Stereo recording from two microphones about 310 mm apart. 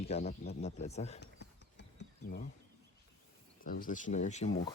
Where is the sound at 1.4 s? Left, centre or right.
Left.